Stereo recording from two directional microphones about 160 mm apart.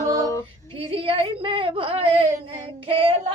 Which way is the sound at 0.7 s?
35° right (ahead or behind).